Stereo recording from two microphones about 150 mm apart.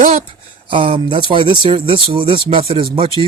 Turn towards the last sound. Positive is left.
turn(degrees=-35)  # may be behind; listen again after turning